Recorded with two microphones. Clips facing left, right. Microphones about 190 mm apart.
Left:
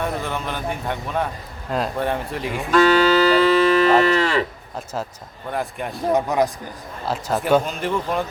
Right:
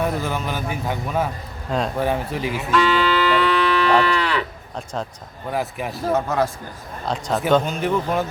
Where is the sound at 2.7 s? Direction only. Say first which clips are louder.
Left 4 dB; 45° left (ahead or behind).